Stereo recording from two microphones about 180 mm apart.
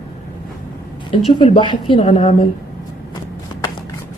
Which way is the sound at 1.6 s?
25° left (ahead or behind).